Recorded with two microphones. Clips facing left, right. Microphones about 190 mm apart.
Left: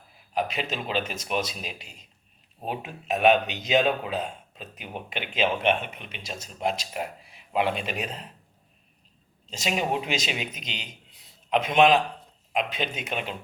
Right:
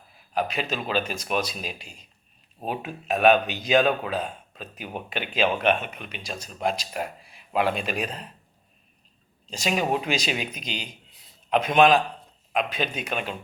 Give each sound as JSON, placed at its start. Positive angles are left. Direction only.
{"t": 0.3, "sound": "speech", "side_deg": 25}
{"t": 9.5, "sound": "speech", "side_deg": 25}